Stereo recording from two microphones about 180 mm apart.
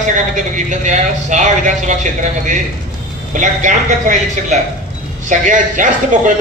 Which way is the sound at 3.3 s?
45° right (ahead or behind).